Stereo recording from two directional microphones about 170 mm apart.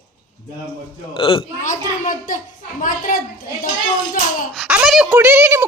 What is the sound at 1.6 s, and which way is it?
A child's voice, 50° left (ahead or behind).